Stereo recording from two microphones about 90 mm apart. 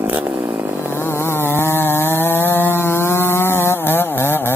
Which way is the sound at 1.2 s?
25° left (ahead or behind).